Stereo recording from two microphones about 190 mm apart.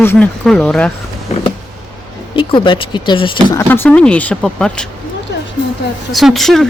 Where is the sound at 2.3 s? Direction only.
25° left (ahead or behind).